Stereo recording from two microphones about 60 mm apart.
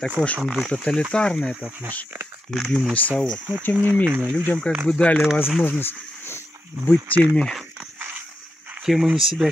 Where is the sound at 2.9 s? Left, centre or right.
Left.